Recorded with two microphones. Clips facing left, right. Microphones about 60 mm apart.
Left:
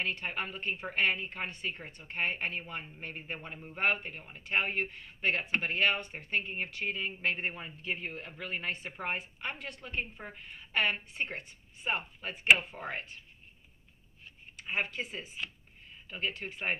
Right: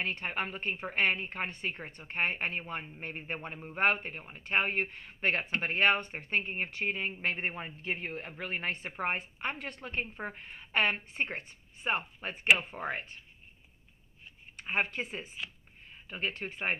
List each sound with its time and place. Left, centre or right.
0.0 s speech: right
14.6 s speech: right